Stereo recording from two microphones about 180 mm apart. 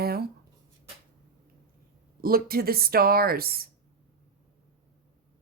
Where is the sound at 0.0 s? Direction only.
60° right (ahead or behind).